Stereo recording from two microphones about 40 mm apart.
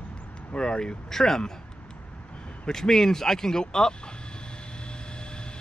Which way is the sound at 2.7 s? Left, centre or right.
Centre.